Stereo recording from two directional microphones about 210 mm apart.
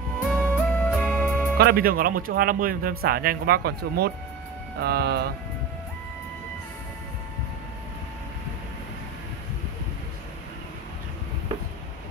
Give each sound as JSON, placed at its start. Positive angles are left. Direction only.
{"t": 0.2, "sound": "music", "side_deg": 5}
{"t": 1.6, "sound": "speech", "side_deg": -45}